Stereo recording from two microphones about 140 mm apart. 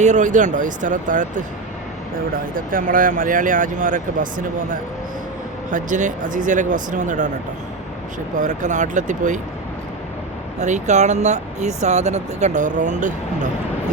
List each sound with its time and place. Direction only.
0.0 s speech: 60° right (ahead or behind)
2.3 s speech: 80° right; by 7.3 s 65° right (ahead or behind)
8.4 s speech: 60° right (ahead or behind)
10.6 s speech: 55° right (ahead or behind)